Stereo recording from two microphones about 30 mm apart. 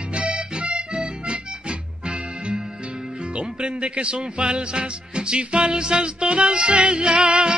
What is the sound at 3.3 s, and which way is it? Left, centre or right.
Speech, right.